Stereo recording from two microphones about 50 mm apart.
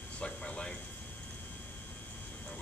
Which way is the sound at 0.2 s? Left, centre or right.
Centre.